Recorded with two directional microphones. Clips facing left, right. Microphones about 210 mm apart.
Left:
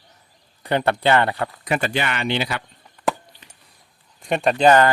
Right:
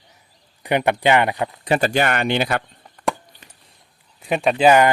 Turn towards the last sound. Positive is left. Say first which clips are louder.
# right 1 dB
turn(degrees=-10)  # may be behind; listen again after turning